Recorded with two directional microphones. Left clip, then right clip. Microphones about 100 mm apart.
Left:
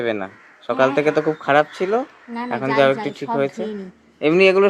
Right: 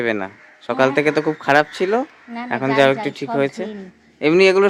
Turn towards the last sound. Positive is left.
turn(degrees=-30)  # may be behind; listen again after turning